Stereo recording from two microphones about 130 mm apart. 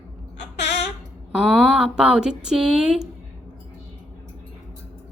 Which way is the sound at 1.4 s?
5° right (ahead or behind).